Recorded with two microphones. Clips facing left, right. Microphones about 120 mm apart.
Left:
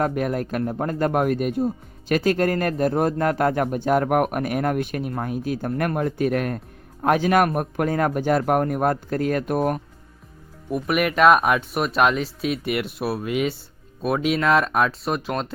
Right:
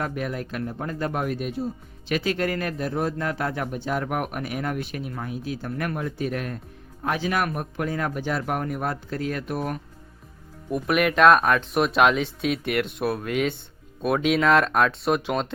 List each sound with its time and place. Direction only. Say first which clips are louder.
0.0 s speech: left 6 dB; 45° left (ahead or behind)
10.7 s speech: even; 5° left (ahead or behind)